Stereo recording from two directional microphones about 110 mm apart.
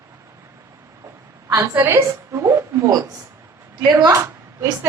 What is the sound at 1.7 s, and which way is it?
A woman's voice, 20° right (ahead or behind).